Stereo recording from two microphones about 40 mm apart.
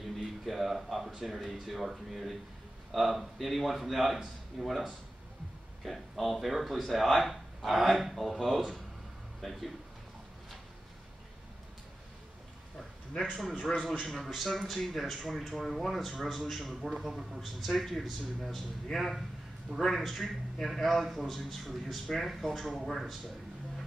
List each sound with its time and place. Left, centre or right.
0.0 s a sound: centre
1.2 s a man's voice: centre
13.7 s speech: centre